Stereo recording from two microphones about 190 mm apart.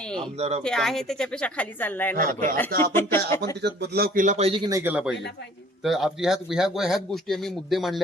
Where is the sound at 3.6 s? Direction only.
60° right (ahead or behind); by 4.8 s 25° right (ahead or behind).